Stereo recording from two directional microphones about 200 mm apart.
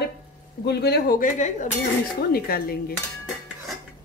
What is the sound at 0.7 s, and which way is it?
A woman's voice, 55° left (ahead or behind).